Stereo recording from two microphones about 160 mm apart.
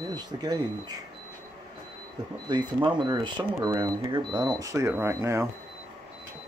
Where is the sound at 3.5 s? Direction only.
20° right (ahead or behind).